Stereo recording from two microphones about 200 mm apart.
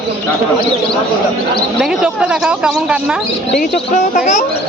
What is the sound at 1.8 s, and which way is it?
Speech, 5° right (ahead or behind).